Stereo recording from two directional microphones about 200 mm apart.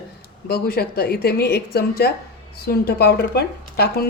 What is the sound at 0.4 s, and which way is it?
Speech, 50° left (ahead or behind).